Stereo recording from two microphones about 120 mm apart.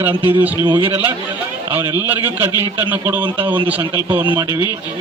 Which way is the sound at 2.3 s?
15° right (ahead or behind).